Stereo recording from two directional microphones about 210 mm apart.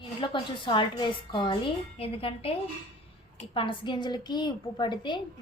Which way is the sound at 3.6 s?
25° left (ahead or behind).